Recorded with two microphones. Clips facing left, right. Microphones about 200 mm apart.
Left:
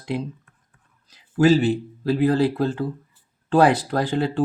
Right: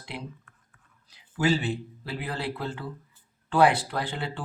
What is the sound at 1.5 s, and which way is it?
Speech, 40° left (ahead or behind).